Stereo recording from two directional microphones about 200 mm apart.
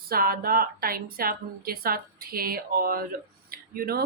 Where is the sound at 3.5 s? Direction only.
50° right (ahead or behind).